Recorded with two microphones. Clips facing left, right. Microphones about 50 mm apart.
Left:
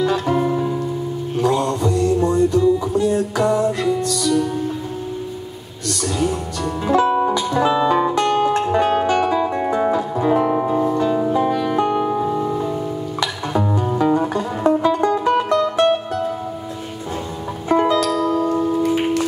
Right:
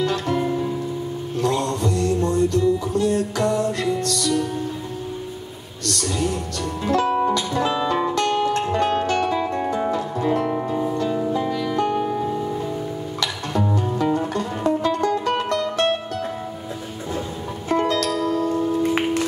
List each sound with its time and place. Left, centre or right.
0.0 s music: centre
1.4 s mantra: centre
2.9 s music: centre
6.1 s music: centre
15.3 s music: centre
17.6 s music: centre
18.5 s music: left